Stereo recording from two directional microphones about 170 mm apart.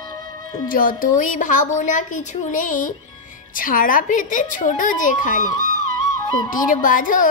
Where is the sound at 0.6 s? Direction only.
55° left (ahead or behind).